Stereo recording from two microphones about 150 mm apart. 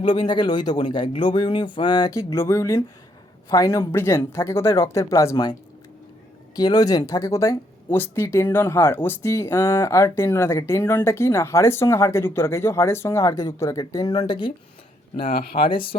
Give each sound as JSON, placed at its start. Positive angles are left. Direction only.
{"t": 0.3, "sound": "speech", "side_deg": 30}
{"t": 6.6, "sound": "speech", "side_deg": 25}
{"t": 15.5, "sound": "speech", "side_deg": 35}